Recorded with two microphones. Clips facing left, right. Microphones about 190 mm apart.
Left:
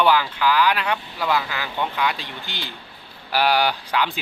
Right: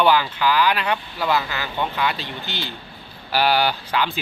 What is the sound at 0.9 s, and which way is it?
Speech, 5° right (ahead or behind).